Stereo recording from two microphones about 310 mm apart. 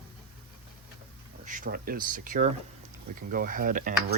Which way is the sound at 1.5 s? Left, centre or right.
Right.